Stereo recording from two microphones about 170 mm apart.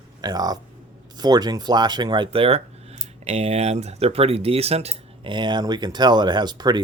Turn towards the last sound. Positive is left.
turn(degrees=-25)  # may be behind; listen again after turning